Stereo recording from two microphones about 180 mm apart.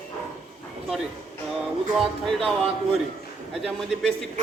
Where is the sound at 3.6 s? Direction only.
Centre (ahead or behind).